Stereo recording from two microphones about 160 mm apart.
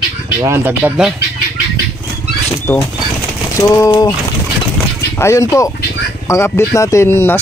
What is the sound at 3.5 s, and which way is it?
Speech, 20° left (ahead or behind).